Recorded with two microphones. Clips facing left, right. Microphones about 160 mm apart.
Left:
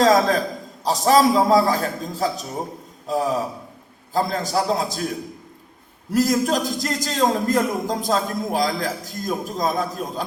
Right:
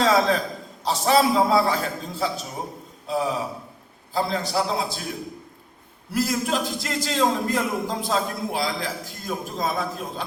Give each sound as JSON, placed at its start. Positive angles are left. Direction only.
{"t": 0.0, "sound": "a man's voice", "side_deg": 45}
{"t": 6.1, "sound": "a man's voice", "side_deg": 40}